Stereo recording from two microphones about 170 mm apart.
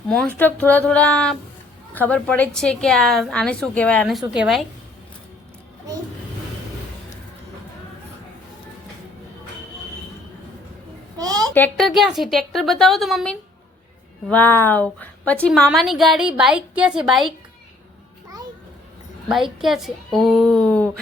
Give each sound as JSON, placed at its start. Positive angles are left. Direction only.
{"t": 0.1, "sound": "a woman's voice", "side_deg": 5}
{"t": 11.2, "sound": "a sound", "side_deg": -20}
{"t": 11.5, "sound": "a woman's voice", "side_deg": 10}
{"t": 11.9, "sound": "a woman's voice", "side_deg": 0}
{"t": 19.3, "sound": "a woman's voice", "side_deg": 0}